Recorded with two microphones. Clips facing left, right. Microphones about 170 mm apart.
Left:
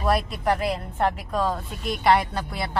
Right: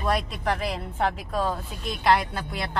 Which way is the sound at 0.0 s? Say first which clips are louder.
Left 3 dB; 5° left (ahead or behind).